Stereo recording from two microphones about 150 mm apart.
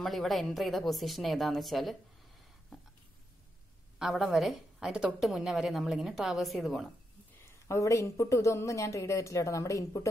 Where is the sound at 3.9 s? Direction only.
Centre (ahead or behind).